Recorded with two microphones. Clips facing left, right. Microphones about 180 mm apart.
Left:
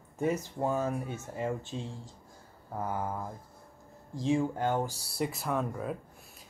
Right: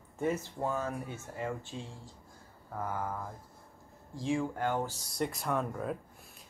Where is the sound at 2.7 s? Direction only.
20° left (ahead or behind).